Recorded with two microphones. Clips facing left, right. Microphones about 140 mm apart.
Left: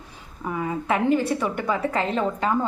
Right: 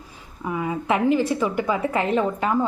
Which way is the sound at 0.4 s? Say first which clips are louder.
Right 1 dB; 10° right (ahead or behind).